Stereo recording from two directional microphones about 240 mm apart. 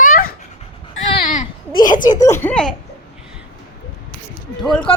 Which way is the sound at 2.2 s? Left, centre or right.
Centre.